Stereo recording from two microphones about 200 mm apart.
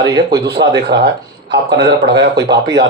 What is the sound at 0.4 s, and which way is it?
Speech, 55° right (ahead or behind).